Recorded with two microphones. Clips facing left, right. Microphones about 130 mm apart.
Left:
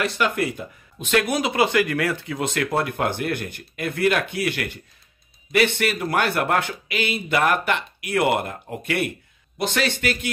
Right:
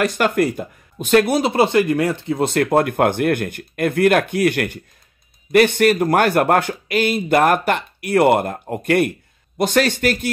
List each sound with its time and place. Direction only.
0.0 s speech: 45° right (ahead or behind)